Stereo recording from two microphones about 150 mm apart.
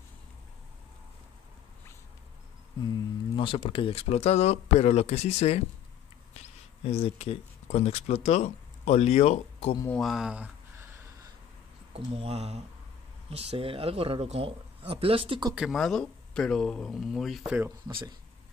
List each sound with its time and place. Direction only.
2.8 s speech: 30° left (ahead or behind)
9.8 s speech: centre (ahead or behind)
11.9 s speech: 40° right (ahead or behind)
15.5 s speech: centre (ahead or behind)